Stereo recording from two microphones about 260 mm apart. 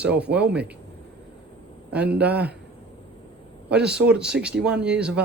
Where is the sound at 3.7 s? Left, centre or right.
Centre.